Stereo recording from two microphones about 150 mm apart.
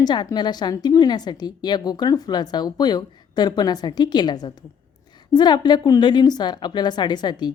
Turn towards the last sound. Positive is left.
turn(degrees=30)  # may be behind; listen again after turning